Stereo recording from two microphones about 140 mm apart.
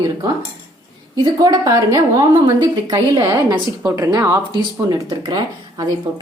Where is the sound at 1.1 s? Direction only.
30° right (ahead or behind).